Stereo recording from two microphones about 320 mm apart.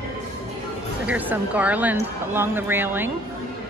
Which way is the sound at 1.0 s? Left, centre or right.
Centre.